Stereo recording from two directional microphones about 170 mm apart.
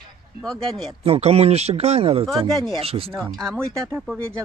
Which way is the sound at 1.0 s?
35° right (ahead or behind).